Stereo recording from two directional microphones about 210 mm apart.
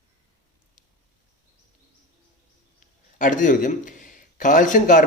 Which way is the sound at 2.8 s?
40° left (ahead or behind).